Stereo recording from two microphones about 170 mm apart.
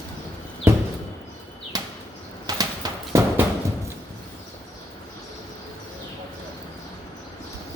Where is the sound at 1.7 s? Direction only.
20° right (ahead or behind).